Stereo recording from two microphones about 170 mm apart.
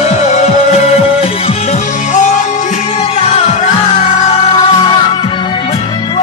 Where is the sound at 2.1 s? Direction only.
45° left (ahead or behind).